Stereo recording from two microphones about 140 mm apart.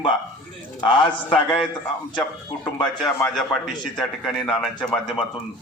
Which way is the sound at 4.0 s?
Centre (ahead or behind).